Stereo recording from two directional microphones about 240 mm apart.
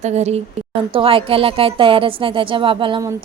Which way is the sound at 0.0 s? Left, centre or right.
Right.